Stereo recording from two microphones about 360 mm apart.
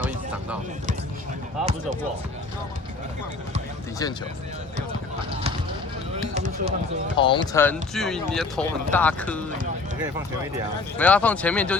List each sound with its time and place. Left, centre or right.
1.6 s speech: centre
6.3 s speech: centre
7.2 s speech: centre
10.9 s speech: centre